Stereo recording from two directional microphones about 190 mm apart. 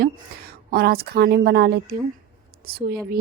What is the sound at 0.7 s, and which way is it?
A woman's voice, 55° right (ahead or behind).